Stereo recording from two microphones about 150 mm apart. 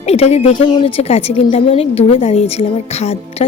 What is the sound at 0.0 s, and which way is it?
Speech, 45° left (ahead or behind).